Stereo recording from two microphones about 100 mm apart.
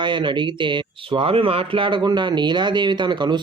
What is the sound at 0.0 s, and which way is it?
Speech, 55° right (ahead or behind).